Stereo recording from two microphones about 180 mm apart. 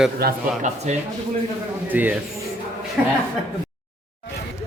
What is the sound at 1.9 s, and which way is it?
Speech, 10° right (ahead or behind).